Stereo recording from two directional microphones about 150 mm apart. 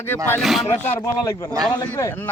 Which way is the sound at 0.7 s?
15° left (ahead or behind).